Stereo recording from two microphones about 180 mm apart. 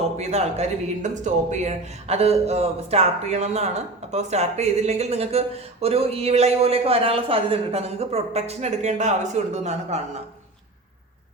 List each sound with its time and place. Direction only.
0.2 s speech: 35° right (ahead or behind)